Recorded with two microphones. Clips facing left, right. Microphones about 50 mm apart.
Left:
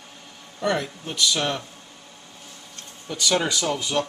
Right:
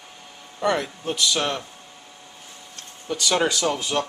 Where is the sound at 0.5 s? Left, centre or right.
Centre.